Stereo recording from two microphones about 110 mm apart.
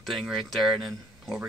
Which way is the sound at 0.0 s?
Centre (ahead or behind).